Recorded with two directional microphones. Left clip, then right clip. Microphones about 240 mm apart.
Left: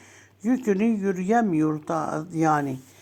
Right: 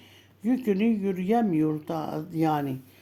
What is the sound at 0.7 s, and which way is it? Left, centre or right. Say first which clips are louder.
Speech: left 3 dB; centre.